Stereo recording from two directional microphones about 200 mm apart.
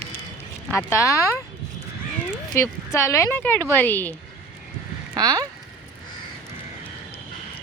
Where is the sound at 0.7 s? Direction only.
15° left (ahead or behind).